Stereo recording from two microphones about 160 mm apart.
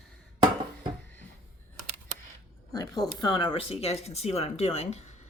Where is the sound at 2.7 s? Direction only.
25° left (ahead or behind); by 5.0 s 40° left (ahead or behind).